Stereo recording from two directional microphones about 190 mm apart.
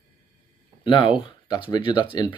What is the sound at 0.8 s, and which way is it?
Speech, 25° left (ahead or behind).